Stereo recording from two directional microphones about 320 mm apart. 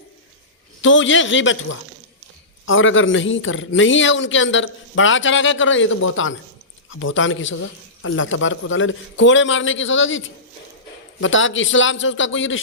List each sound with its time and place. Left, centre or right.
0.8 s a man's voice: left